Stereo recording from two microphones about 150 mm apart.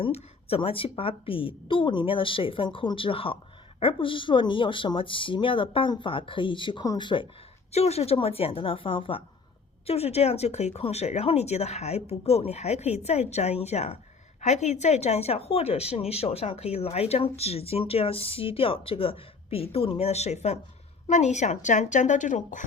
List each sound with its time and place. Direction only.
0.0 s speech: 40° left (ahead or behind)
7.7 s speech: 45° left (ahead or behind)